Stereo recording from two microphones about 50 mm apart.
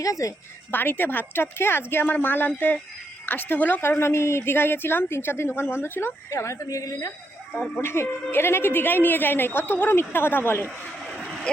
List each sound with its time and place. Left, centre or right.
0.2 s a woman's voice: left
0.7 s a woman's voice: left
3.8 s speech: left
6.4 s a woman's voice: left
7.8 s speech: left
9.9 s speech: left
11.5 s speech: centre